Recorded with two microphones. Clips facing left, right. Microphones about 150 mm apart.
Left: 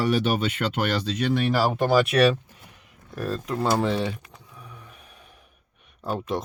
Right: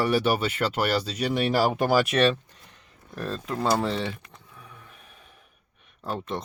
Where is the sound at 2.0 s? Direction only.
Centre (ahead or behind).